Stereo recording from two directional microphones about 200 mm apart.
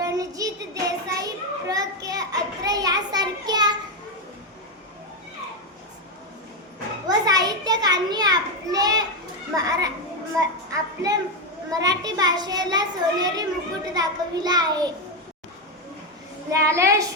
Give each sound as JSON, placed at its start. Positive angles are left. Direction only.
{"t": 0.0, "sound": "child singing", "side_deg": -15}
{"t": 7.1, "sound": "children playing", "side_deg": -20}
{"t": 10.4, "sound": "a sound", "side_deg": -15}
{"t": 11.7, "sound": "children playing", "side_deg": -20}
{"t": 13.9, "sound": "a sound", "side_deg": -20}
{"t": 16.5, "sound": "child singing", "side_deg": -15}